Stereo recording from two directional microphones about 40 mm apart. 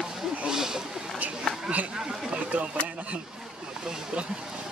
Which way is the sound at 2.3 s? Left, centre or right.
Right.